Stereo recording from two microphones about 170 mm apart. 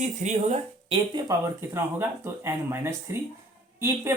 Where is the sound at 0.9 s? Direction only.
20° right (ahead or behind).